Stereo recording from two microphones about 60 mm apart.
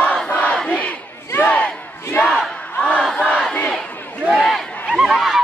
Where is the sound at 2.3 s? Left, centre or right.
Centre.